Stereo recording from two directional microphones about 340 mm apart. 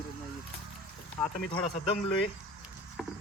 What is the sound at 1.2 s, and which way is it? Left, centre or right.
Speech, centre.